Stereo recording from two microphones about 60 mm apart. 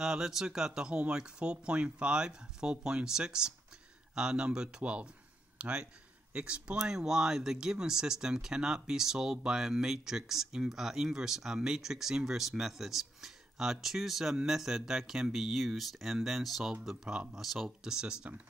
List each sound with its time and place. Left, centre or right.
0.0 s speech: centre
17.0 s speech: centre
17.4 s speech: centre
17.6 s speech: centre